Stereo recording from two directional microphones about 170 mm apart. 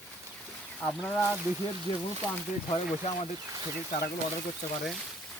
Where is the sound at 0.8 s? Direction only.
5° left (ahead or behind).